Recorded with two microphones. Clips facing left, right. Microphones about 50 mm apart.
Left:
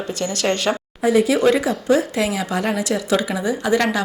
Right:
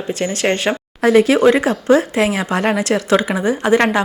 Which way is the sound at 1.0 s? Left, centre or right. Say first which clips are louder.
Right 5 dB; right.